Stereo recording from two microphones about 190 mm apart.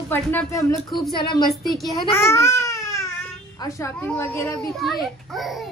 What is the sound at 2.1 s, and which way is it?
Baby cry, 15° left (ahead or behind).